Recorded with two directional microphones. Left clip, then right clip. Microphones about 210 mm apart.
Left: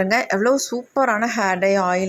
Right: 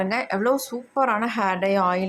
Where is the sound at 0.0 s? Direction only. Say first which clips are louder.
Left 5 dB; 20° left (ahead or behind).